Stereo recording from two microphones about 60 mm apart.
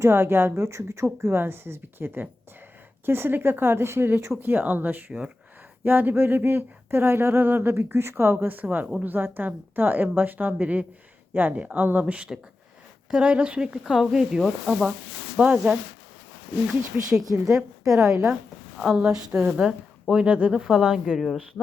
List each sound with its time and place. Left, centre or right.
0.0 s speech: right
4.4 s speech: right; by 14.9 s centre
15.4 s speech: right
16.6 s a woman's voice: centre
19.3 s speech: centre